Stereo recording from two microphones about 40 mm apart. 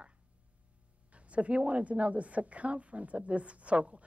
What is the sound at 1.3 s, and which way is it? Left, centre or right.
A woman's voice, right.